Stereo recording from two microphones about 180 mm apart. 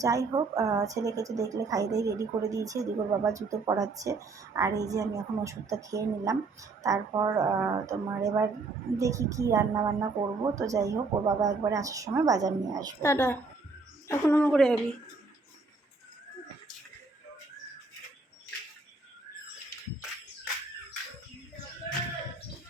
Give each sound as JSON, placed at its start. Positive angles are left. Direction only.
{"t": 0.0, "sound": "a woman's voice", "side_deg": -20}
{"t": 13.0, "sound": "a woman's voice", "side_deg": 15}